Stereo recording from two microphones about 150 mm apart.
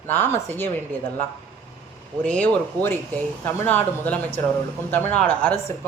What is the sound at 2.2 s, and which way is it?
Speech, 10° left (ahead or behind).